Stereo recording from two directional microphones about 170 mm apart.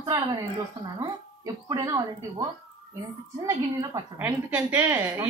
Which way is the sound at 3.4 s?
15° right (ahead or behind).